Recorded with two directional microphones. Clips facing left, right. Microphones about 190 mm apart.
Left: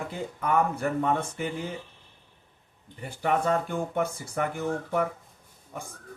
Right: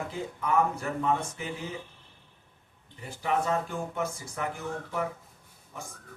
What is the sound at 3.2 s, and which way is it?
Speech, 55° left (ahead or behind).